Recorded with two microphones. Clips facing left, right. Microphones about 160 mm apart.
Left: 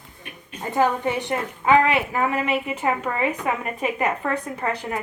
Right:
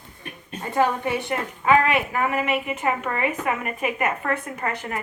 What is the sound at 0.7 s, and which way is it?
Speech, 20° left (ahead or behind).